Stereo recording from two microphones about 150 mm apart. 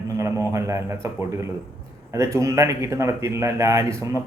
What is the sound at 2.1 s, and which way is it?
Speech, 20° right (ahead or behind).